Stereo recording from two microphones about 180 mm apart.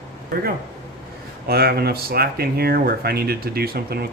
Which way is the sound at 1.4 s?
60° right (ahead or behind).